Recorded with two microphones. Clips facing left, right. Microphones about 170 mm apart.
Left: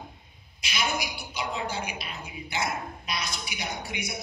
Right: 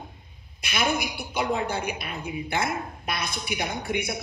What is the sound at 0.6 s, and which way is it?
A woman's voice, 55° right (ahead or behind).